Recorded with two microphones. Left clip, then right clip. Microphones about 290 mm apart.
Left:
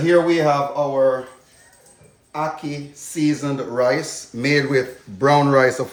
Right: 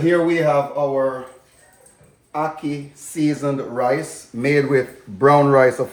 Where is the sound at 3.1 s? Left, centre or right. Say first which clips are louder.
Right 1 dB; centre.